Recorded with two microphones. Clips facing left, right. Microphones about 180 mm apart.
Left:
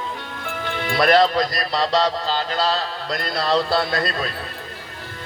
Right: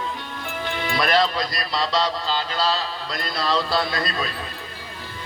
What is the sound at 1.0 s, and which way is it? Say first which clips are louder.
Speech: left 5 dB; 40° left (ahead or behind).